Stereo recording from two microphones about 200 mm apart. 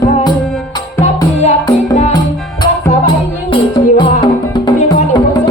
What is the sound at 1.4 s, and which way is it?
Music, 20° left (ahead or behind).